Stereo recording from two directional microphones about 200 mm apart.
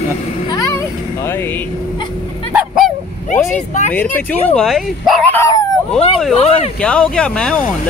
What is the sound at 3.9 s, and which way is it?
Speech, 10° left (ahead or behind).